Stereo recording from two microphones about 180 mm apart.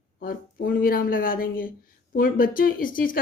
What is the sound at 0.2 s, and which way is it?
Speech, 50° left (ahead or behind).